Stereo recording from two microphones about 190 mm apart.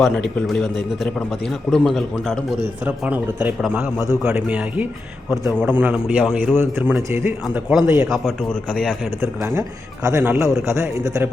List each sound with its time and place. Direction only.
0.0 s a man's voice: centre (ahead or behind)
7.4 s a man's voice: centre (ahead or behind)
7.9 s speech: 15° right (ahead or behind)
8.1 s a man's voice: centre (ahead or behind)
9.2 s speech: 15° right (ahead or behind)